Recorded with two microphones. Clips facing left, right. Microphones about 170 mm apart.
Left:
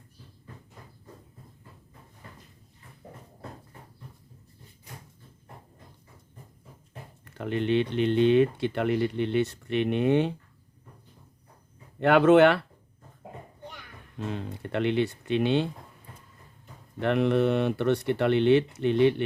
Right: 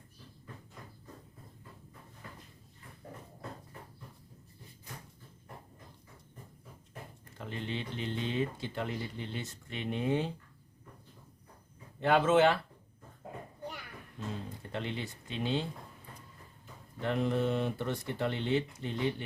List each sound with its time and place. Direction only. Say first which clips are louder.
7.3 s speech: left 13 dB; 65° left (ahead or behind)
11.9 s speech: left 8 dB; 65° left (ahead or behind)
13.2 s a sound: left 1 dB; 15° left (ahead or behind)
14.3 s speech: left 7 dB; 70° left (ahead or behind)
17.0 s speech: left 8 dB; 70° left (ahead or behind)